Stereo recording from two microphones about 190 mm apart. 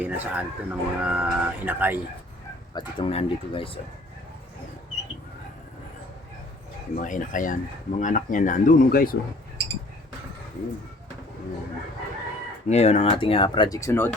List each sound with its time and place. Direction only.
0.0 s speech: 5° right (ahead or behind)
2.7 s speech: 30° left (ahead or behind)
6.9 s speech: 45° left (ahead or behind)
12.6 s speech: 35° left (ahead or behind); by 14.1 s 15° left (ahead or behind)